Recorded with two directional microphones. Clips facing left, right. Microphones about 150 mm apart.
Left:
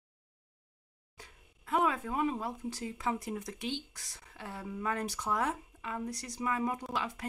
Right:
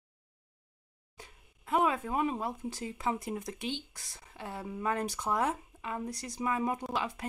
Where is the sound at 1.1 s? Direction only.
20° right (ahead or behind).